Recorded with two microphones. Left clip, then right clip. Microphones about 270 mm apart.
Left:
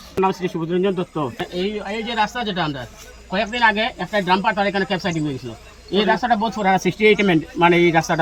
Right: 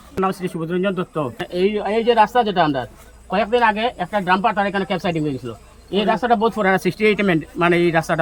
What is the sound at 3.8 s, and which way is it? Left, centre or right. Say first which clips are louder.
Speech: even; centre.